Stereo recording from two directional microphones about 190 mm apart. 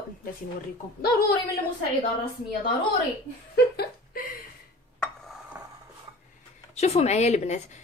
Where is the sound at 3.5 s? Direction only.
55° left (ahead or behind).